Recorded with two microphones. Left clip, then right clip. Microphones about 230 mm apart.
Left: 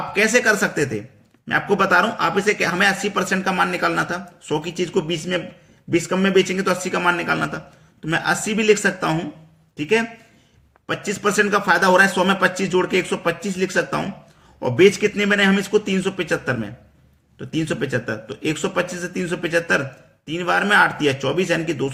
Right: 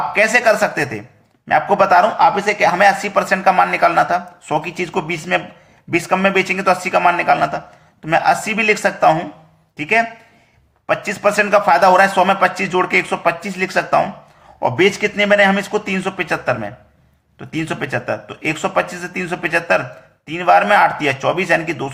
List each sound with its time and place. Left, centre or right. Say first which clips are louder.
0.1 s a man's voice: right 3 dB; centre
10.8 s a man's voice: right 6 dB; centre